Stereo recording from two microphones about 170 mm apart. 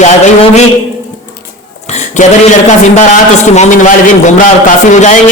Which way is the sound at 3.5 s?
45° left (ahead or behind).